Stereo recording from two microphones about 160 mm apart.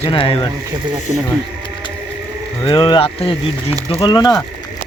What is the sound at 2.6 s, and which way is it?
Speech, 30° left (ahead or behind).